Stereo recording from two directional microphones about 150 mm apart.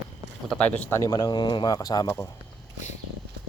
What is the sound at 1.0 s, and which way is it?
Speech, 25° left (ahead or behind).